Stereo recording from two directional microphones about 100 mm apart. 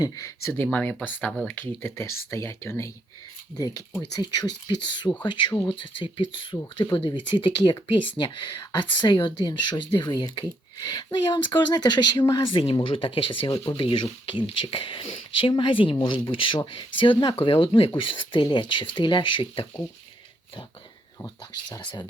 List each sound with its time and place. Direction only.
0.0 s speech: 30° left (ahead or behind); by 1.0 s 10° left (ahead or behind)
1.6 s speech: 30° left (ahead or behind)
3.5 s speech: 40° left (ahead or behind); by 19.6 s 55° left (ahead or behind)
21.5 s speech: 45° left (ahead or behind)